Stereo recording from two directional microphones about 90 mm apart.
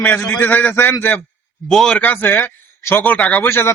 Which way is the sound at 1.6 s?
5° left (ahead or behind).